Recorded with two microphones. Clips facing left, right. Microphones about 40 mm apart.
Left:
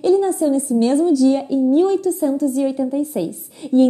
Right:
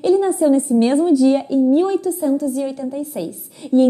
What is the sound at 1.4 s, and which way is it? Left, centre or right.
A woman's voice, centre.